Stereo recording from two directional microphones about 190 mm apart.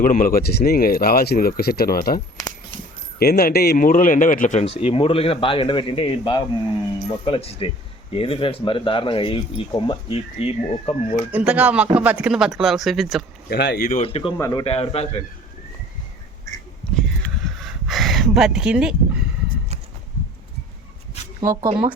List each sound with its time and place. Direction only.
0.0 s speech: 45° left (ahead or behind)
11.3 s speech: 10° right (ahead or behind)
13.5 s speech: 55° left (ahead or behind)
14.0 s speech: 30° left (ahead or behind)
14.3 s speech: 15° left (ahead or behind)
14.6 s a man's voice: 30° left (ahead or behind)
16.9 s a sound: centre (ahead or behind)
21.4 s speech: 15° right (ahead or behind)